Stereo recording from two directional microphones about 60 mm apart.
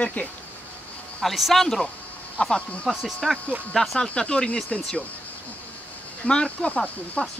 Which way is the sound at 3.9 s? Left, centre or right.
Centre.